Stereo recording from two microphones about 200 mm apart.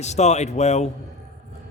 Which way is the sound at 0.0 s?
35° left (ahead or behind).